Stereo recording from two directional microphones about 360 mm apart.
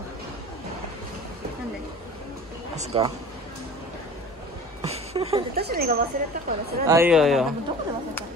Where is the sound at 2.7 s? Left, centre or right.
Centre.